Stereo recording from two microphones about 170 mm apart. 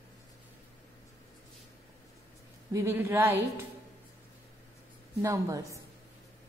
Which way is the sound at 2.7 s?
15° right (ahead or behind).